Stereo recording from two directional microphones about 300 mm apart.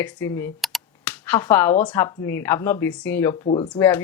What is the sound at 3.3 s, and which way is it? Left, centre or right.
Speech, centre.